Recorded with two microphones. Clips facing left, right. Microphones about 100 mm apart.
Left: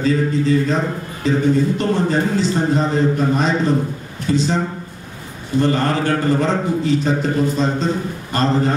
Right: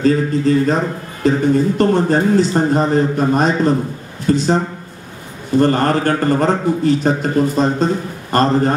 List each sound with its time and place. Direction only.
0.0 s a man's voice: 45° right (ahead or behind)
5.6 s a man's voice: 45° right (ahead or behind)